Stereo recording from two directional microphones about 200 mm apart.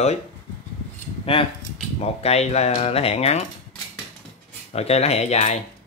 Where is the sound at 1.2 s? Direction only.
25° left (ahead or behind).